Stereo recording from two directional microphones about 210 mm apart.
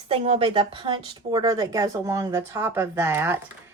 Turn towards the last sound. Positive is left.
turn(degrees=-10)  # may be behind; listen again after turning